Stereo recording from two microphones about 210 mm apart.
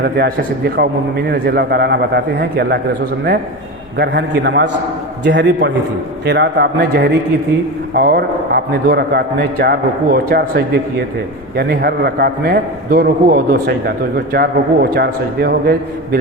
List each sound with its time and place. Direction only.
0.0 s a man's voice: 50° right (ahead or behind)
3.9 s a man's voice: 55° right (ahead or behind)